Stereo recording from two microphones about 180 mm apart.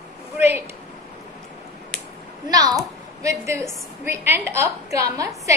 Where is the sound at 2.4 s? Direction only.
20° right (ahead or behind).